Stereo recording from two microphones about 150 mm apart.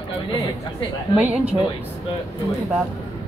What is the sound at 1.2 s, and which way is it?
Speech, 10° right (ahead or behind).